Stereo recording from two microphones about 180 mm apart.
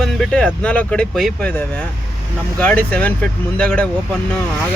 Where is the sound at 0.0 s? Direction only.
5° left (ahead or behind).